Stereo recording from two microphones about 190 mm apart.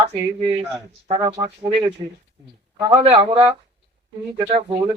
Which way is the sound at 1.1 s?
20° right (ahead or behind).